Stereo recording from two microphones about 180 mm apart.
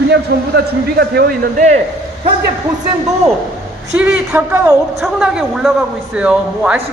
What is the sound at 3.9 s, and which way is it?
A woman's voice, 5° right (ahead or behind).